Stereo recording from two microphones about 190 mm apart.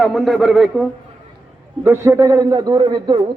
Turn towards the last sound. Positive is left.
turn(degrees=-20)  # may be behind; listen again after turning